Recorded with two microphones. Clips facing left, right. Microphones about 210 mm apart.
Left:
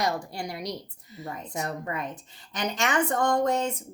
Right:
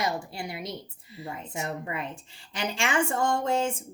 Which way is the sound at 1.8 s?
40° left (ahead or behind).